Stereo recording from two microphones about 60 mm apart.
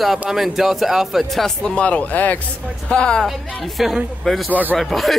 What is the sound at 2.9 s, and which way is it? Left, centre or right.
Speech, centre.